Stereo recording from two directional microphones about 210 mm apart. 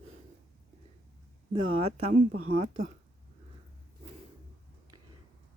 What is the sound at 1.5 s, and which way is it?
Speech, 25° right (ahead or behind).